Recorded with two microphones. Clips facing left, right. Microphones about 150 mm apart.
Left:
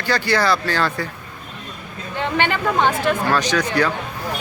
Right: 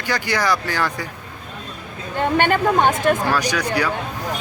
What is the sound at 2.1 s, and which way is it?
Speech, 45° right (ahead or behind).